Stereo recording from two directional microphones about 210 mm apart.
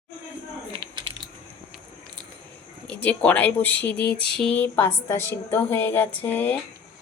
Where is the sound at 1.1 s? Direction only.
70° right (ahead or behind).